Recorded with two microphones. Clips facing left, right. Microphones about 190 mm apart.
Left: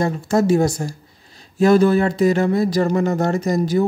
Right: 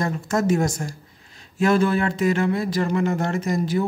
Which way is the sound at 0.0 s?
30° left (ahead or behind).